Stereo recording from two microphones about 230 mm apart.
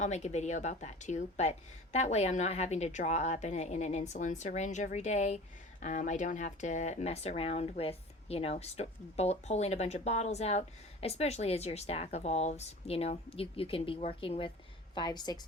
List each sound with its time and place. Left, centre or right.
0.0 s a woman's voice: left